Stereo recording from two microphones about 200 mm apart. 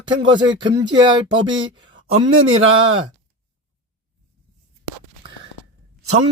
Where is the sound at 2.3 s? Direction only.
90° right.